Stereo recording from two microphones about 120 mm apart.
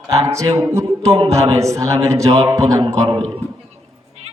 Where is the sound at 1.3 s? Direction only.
25° right (ahead or behind).